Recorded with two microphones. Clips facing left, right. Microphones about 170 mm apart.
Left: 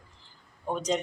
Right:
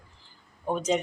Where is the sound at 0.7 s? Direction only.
5° right (ahead or behind).